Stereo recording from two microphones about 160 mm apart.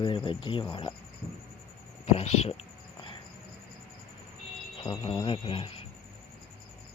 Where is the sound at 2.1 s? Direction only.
40° left (ahead or behind).